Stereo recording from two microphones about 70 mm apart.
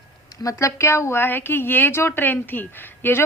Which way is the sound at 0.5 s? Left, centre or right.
Left.